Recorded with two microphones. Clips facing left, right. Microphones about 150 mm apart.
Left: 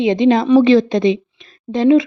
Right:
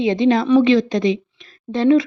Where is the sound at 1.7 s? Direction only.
15° left (ahead or behind).